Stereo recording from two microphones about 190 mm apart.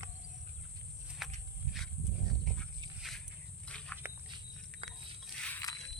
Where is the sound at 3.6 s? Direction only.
5° left (ahead or behind).